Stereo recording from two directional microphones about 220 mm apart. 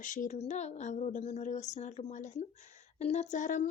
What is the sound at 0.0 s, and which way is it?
Speech, 35° left (ahead or behind).